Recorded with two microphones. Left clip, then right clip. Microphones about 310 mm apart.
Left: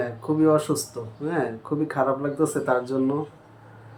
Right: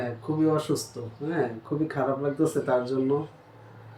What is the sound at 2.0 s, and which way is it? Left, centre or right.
Speech, centre.